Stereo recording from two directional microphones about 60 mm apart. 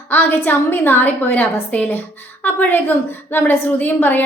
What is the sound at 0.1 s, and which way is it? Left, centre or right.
A woman's voice, left.